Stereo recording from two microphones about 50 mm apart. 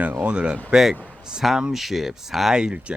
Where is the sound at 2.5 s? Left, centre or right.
Centre.